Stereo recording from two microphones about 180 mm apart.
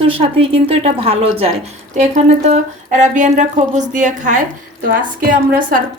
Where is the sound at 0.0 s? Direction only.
30° right (ahead or behind).